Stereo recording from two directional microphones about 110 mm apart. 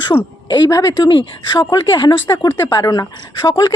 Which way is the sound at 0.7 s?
30° left (ahead or behind).